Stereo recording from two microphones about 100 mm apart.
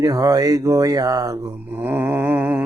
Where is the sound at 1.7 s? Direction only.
20° right (ahead or behind).